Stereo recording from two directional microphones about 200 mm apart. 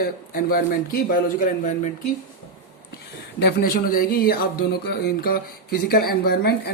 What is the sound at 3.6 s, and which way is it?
Speech, 45° left (ahead or behind).